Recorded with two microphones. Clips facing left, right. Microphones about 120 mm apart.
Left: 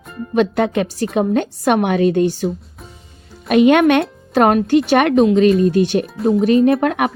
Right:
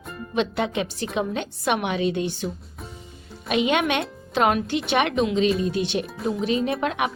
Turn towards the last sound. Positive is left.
turn(degrees=50)  # may be behind; listen again after turning